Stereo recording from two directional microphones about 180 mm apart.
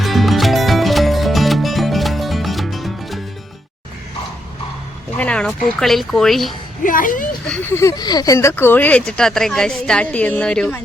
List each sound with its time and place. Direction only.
0.0 s music: centre (ahead or behind)
5.1 s a sound: 5° left (ahead or behind)
5.8 s speech: centre (ahead or behind)
6.8 s speech: 50° left (ahead or behind)
7.4 s speech: 10° left (ahead or behind)